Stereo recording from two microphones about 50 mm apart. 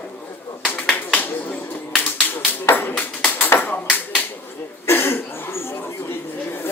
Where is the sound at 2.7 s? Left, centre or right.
Left.